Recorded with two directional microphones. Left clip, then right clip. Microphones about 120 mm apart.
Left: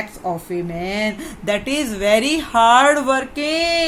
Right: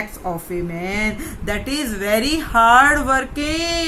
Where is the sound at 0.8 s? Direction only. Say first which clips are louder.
Even; 45° left (ahead or behind).